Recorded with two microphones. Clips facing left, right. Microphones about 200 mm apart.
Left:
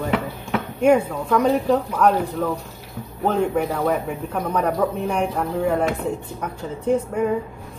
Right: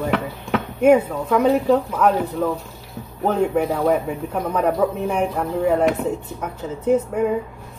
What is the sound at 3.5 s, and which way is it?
Speech, 5° right (ahead or behind).